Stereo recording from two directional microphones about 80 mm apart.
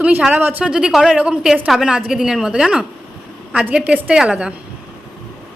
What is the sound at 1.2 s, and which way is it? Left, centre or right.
A woman's voice, centre.